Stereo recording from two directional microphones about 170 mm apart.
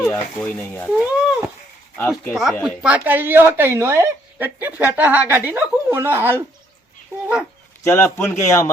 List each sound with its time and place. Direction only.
0.3 s speech: 10° left (ahead or behind)
0.9 s speech: 5° right (ahead or behind)
2.0 s speech: 15° left (ahead or behind)
2.3 s speech: centre (ahead or behind)
7.9 s speech: 15° left (ahead or behind)